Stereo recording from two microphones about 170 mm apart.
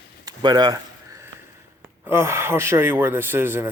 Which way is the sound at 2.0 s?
15° right (ahead or behind).